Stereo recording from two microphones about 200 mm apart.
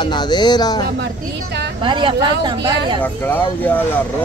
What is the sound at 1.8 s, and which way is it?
Speech, 25° right (ahead or behind).